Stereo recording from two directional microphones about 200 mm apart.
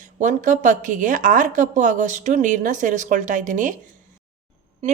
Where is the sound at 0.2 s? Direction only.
40° right (ahead or behind).